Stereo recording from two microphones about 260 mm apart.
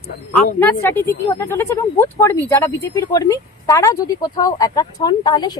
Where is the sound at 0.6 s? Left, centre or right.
Centre.